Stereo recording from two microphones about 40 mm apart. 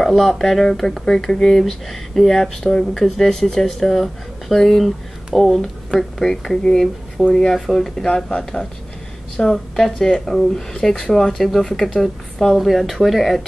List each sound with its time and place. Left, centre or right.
0.0 s speech: centre
7.4 s speech: centre
7.7 s speech: centre